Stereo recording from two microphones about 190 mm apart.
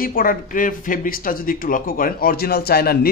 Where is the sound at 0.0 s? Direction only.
50° left (ahead or behind).